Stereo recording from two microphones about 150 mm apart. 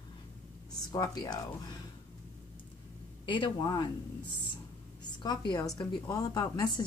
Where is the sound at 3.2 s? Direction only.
30° left (ahead or behind).